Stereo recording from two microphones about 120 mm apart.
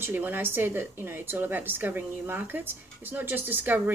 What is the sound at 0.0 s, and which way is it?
A woman's voice, 15° right (ahead or behind).